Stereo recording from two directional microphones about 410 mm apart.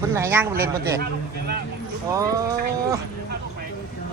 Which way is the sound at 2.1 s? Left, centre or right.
Centre.